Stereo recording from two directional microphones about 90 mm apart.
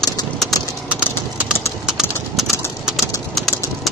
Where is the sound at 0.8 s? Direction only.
15° right (ahead or behind).